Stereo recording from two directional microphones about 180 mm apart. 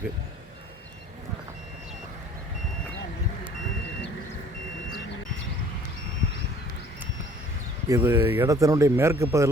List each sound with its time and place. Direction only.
7.9 s speech: 20° right (ahead or behind)